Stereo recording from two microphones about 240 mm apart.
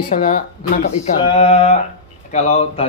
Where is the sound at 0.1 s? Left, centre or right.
Left.